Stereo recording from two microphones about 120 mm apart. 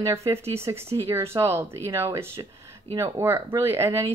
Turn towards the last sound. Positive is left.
turn(degrees=-25)  # may be behind; listen again after turning